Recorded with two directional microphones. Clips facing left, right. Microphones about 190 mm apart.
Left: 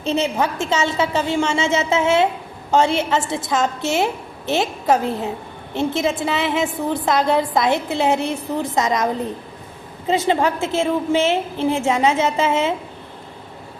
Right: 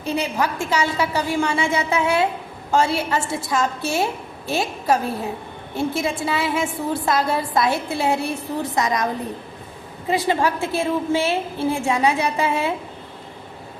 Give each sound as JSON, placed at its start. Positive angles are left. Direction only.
{"t": 0.0, "sound": "a woman's voice", "side_deg": 25}
{"t": 10.1, "sound": "a woman's voice", "side_deg": 20}